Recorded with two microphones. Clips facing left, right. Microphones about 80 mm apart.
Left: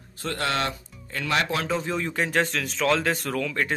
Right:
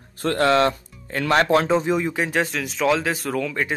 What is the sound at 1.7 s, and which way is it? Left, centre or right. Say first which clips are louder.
Speech: right 7 dB; centre.